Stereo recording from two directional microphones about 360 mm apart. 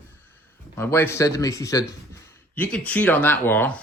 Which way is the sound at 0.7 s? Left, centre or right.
Centre.